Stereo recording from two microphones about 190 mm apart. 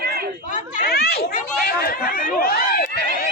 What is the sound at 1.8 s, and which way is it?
Speech, 50° left (ahead or behind).